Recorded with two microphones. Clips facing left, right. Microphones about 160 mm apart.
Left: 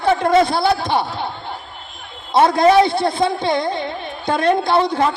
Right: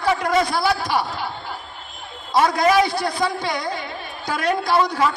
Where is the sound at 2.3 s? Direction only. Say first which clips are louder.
Left 4 dB; 25° left (ahead or behind).